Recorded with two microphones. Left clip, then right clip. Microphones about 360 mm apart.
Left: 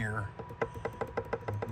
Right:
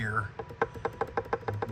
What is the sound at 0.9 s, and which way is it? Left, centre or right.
Music, centre.